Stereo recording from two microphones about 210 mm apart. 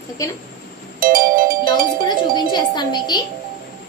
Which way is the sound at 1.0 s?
40° right (ahead or behind).